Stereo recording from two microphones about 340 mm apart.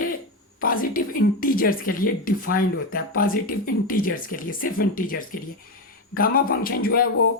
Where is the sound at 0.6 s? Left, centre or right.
Left.